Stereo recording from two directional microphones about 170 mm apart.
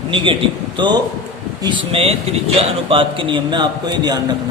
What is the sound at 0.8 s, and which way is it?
A man's voice, 25° right (ahead or behind).